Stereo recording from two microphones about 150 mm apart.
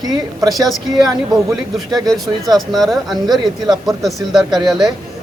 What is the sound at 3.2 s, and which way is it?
Speech, 25° right (ahead or behind).